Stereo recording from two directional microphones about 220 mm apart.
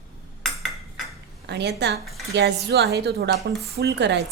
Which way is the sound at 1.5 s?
50° right (ahead or behind).